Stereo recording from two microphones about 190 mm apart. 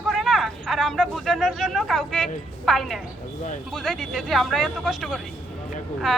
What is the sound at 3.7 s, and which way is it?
Speech, centre (ahead or behind).